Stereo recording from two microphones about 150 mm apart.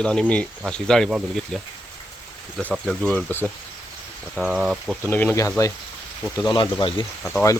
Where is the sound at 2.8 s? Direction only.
5° left (ahead or behind).